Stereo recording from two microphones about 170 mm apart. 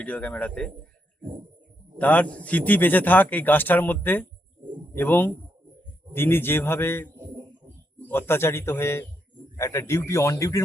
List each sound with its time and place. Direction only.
0.0 s speech: 10° left (ahead or behind)
2.0 s speech: 10° left (ahead or behind)
7.2 s bird: 25° right (ahead or behind)
8.0 s speech: 15° left (ahead or behind)